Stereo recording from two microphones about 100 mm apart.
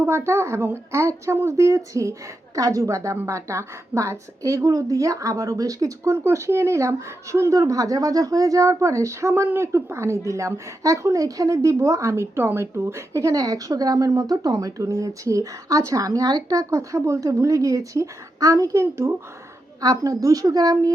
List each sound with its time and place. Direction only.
0.0 s a woman's voice: 25° right (ahead or behind)